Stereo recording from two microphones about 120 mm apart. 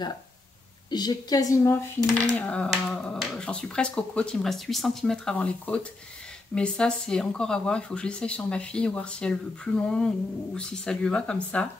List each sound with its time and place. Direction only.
0.8 s a woman's voice: 35° left (ahead or behind)
2.4 s speech: 10° left (ahead or behind)